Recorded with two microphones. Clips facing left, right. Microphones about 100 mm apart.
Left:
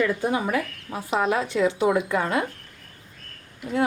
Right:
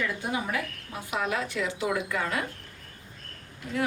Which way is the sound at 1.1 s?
30° left (ahead or behind).